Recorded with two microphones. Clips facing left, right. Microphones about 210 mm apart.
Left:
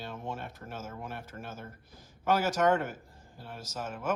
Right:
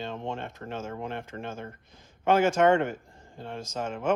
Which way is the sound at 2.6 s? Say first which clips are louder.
Right 5 dB; 65° right (ahead or behind).